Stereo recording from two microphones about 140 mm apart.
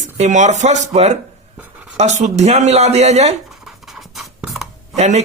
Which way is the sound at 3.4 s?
Centre (ahead or behind).